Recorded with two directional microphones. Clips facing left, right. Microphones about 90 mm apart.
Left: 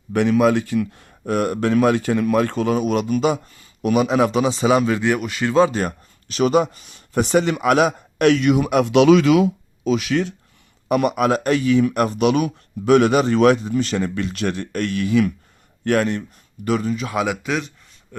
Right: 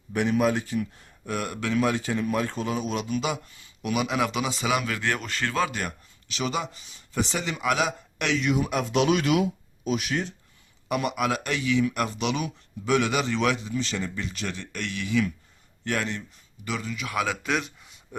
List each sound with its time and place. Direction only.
0.1 s speech: 90° left
1.2 s a man's voice: 50° left (ahead or behind); by 4.9 s 30° left (ahead or behind)
4.9 s speech: 15° left (ahead or behind)
5.5 s speech: 30° left (ahead or behind); by 10.3 s 90° left
10.8 s speech: 50° left (ahead or behind)
17.1 s speech: 20° left (ahead or behind)
17.4 s speech: centre (ahead or behind)
18.1 s speech: 15° right (ahead or behind)